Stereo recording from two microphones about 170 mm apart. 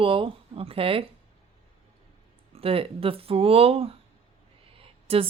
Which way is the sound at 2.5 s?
35° right (ahead or behind).